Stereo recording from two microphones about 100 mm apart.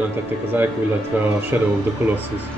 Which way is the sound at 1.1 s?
15° right (ahead or behind).